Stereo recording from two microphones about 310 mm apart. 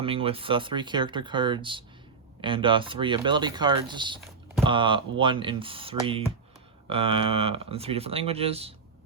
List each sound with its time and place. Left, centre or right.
0.0 s speech: centre